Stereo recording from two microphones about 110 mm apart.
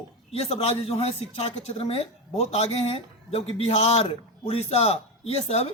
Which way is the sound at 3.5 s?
60° left (ahead or behind).